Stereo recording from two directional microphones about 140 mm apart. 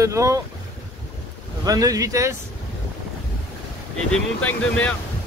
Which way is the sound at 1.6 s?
25° right (ahead or behind).